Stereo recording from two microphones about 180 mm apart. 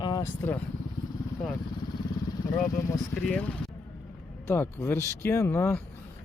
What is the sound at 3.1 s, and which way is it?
Speech, 5° left (ahead or behind).